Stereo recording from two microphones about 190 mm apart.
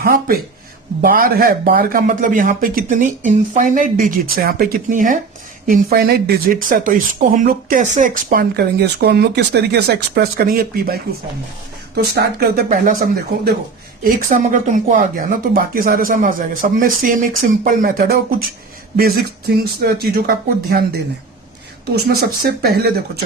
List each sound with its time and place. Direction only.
0.0 s speech: 50° right (ahead or behind)
12.6 s speech: 45° right (ahead or behind)
21.9 s speech: 55° right (ahead or behind)